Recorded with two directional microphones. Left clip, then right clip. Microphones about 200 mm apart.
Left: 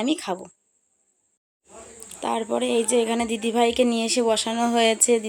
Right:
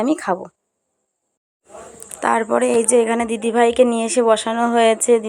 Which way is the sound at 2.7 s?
5° left (ahead or behind).